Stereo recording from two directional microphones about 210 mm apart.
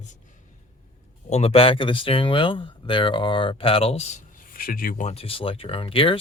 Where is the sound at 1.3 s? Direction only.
30° left (ahead or behind).